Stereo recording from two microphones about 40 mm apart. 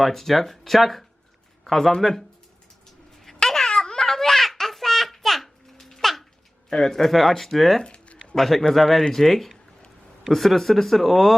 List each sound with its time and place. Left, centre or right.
0.0 s speech: centre
3.4 s baby laughter: centre
6.7 s speech: centre
7.8 s a sound: left
8.4 s speech: centre